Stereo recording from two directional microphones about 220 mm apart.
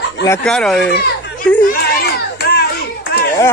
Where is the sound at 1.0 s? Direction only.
50° left (ahead or behind).